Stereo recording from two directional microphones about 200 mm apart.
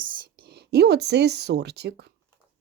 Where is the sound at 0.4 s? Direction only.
55° right (ahead or behind).